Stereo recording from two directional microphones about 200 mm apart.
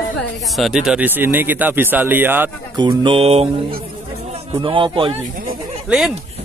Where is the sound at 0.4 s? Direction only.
Centre (ahead or behind).